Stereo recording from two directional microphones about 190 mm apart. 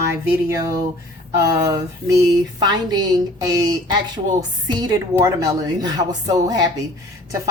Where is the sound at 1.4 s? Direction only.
15° right (ahead or behind).